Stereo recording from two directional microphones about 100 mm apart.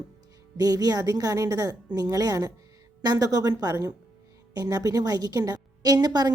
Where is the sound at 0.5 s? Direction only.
40° right (ahead or behind).